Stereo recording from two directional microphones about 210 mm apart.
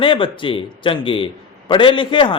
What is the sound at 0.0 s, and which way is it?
A man's voice, 25° left (ahead or behind).